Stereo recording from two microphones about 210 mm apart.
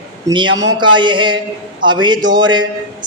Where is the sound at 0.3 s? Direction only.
20° right (ahead or behind).